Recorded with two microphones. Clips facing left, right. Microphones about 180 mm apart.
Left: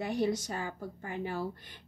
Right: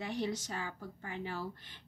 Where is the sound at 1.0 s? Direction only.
50° left (ahead or behind).